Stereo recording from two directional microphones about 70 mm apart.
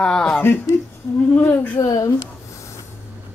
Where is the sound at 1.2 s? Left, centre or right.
Left.